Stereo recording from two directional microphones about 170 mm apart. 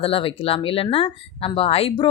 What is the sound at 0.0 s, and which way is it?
Speech, 35° left (ahead or behind).